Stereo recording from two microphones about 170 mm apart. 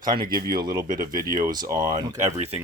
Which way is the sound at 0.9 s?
55° right (ahead or behind).